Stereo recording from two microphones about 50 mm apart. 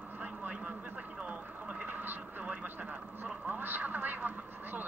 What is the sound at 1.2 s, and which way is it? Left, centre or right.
Television, right.